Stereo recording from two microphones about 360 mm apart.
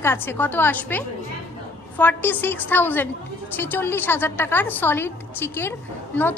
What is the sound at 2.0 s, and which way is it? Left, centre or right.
A woman's voice, centre.